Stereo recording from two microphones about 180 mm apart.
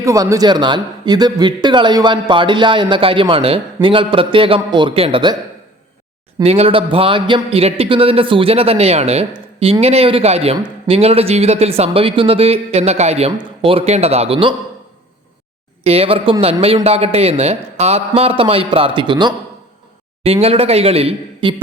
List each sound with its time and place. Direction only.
0.0 s a man's voice: 15° right (ahead or behind)
6.4 s a man's voice: 35° right (ahead or behind)
15.8 s a man's voice: 35° right (ahead or behind)